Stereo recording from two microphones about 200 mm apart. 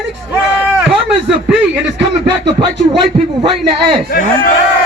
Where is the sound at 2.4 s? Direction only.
25° right (ahead or behind).